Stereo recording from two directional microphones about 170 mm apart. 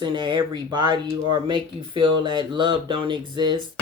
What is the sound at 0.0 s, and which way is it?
Speech, 25° right (ahead or behind).